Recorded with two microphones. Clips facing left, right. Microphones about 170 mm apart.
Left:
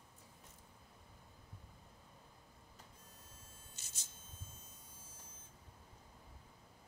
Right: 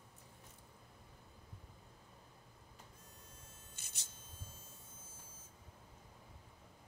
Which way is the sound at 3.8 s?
55° right (ahead or behind).